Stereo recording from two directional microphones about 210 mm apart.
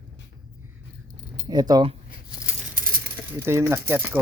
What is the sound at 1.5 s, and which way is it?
Speech, 20° right (ahead or behind).